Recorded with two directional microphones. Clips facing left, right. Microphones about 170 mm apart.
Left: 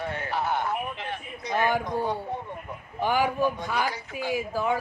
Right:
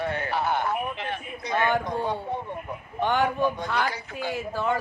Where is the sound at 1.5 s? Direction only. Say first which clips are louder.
Right 1 dB; 10° left (ahead or behind).